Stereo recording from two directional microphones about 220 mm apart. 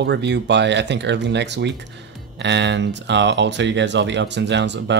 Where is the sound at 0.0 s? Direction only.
50° right (ahead or behind).